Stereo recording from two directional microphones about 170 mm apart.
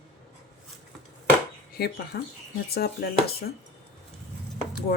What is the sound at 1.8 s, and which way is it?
A woman's voice, 65° left (ahead or behind).